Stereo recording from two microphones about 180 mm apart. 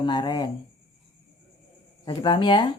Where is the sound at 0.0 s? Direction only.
25° left (ahead or behind).